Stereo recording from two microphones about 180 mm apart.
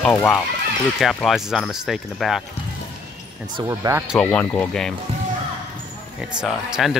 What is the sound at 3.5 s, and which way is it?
Speech, 20° right (ahead or behind).